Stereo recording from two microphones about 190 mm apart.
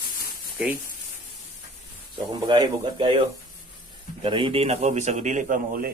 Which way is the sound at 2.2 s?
25° right (ahead or behind).